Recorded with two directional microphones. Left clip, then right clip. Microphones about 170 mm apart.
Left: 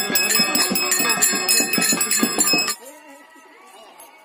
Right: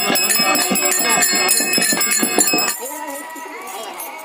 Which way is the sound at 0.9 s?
25° left (ahead or behind).